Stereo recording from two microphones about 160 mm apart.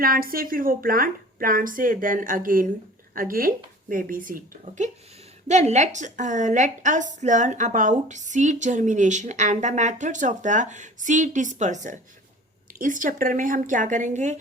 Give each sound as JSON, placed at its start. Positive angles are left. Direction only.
{"t": 0.0, "sound": "a woman's voice", "side_deg": -65}